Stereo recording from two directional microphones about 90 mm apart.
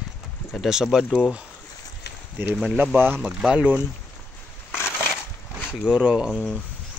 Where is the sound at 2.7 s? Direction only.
20° right (ahead or behind).